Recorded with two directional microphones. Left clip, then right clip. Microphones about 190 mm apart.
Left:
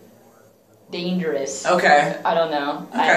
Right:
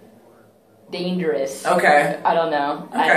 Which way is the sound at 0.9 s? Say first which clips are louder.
Right 2 dB; 15° right (ahead or behind).